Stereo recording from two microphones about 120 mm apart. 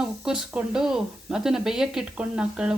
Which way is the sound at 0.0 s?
5° right (ahead or behind).